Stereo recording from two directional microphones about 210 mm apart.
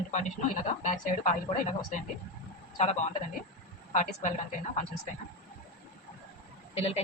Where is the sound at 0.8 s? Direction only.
35° left (ahead or behind).